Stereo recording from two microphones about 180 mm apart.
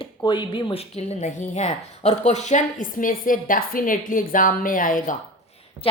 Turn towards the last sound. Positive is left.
turn(degrees=50)  # may be behind; listen again after turning